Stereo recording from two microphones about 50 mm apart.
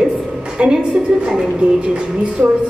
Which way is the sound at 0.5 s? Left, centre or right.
Centre.